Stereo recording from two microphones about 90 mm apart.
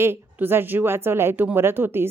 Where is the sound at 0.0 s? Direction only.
25° right (ahead or behind).